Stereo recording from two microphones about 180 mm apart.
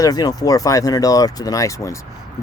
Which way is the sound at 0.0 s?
20° left (ahead or behind).